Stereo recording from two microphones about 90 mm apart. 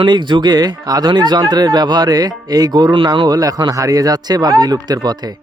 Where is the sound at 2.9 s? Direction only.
65° right (ahead or behind).